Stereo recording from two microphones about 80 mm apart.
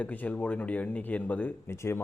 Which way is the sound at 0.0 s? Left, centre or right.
Left.